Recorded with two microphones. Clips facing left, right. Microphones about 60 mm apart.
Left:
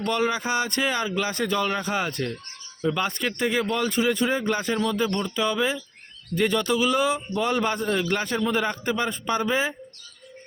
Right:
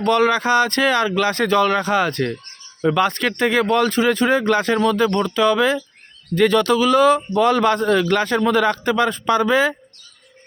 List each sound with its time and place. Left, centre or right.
0.0 s a man's voice: right